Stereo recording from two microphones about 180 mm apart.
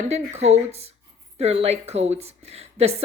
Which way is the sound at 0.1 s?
40° right (ahead or behind).